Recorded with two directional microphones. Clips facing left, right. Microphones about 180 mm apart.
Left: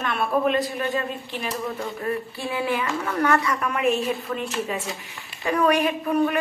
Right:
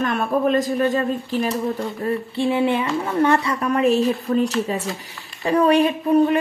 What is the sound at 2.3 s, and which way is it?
Speech, 25° right (ahead or behind).